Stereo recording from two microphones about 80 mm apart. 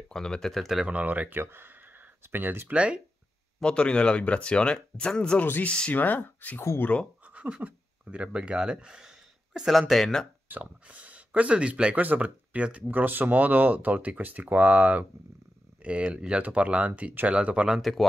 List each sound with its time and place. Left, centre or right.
0.1 s speech: centre
0.8 s speech: centre
2.7 s speech: centre
3.6 s speech: centre
7.2 s speech: centre
10.5 s speech: centre